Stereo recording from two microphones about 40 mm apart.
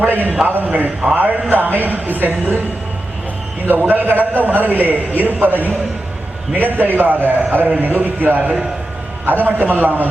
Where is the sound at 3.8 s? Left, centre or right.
Right.